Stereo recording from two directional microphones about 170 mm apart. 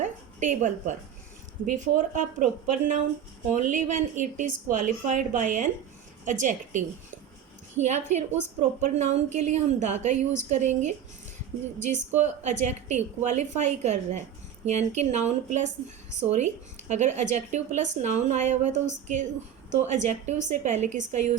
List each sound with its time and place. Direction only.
0.0 s a woman's voice: 45° right (ahead or behind)
16.9 s a woman's voice: 45° right (ahead or behind)